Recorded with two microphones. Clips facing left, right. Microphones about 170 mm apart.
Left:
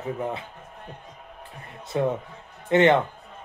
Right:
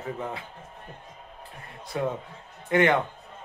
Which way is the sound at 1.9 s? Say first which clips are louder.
Left 4 dB; 25° left (ahead or behind).